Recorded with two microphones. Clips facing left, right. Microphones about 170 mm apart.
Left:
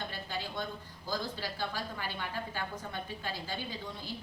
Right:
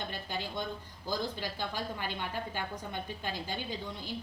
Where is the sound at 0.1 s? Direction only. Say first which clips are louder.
Right 1 dB; 20° right (ahead or behind).